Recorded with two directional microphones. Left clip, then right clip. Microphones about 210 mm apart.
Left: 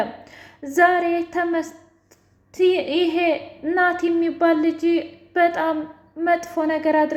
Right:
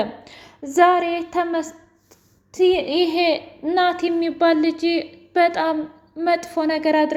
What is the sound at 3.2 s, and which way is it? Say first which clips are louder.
Speech: right 2 dB; 40° right (ahead or behind).